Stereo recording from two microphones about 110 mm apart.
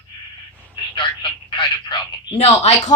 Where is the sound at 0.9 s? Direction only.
50° left (ahead or behind).